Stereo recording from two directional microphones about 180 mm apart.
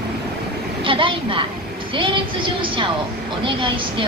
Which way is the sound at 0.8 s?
30° right (ahead or behind).